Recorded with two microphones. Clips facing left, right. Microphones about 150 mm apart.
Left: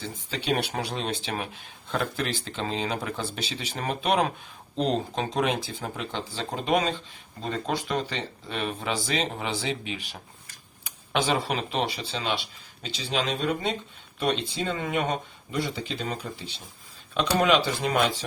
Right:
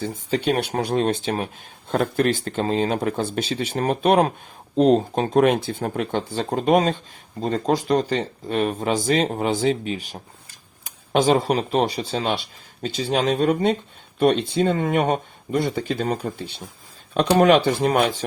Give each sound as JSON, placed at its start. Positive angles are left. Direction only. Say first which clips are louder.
{"t": 0.0, "sound": "speech", "louder": "right 10 dB", "side_deg": -50}